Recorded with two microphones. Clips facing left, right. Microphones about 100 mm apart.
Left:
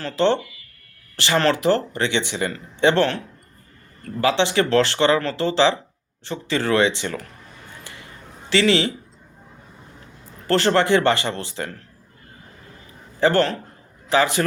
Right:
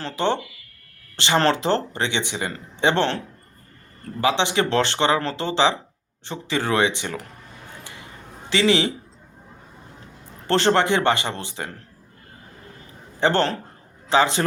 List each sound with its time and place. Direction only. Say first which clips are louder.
0.0 s speech: left 4 dB; 15° right (ahead or behind)
4.2 s speech: left 2 dB; 20° right (ahead or behind)
8.4 s speech: left 1 dB; 20° right (ahead or behind)
10.4 s speech: left 1 dB; 20° right (ahead or behind)
13.1 s a man's voice: left 2 dB; 25° right (ahead or behind)